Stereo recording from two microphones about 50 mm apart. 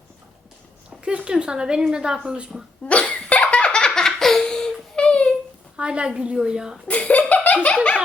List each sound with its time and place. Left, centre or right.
0.9 s speech: centre
2.8 s laughter: left
5.7 s a woman's voice: centre
6.8 s laughter: left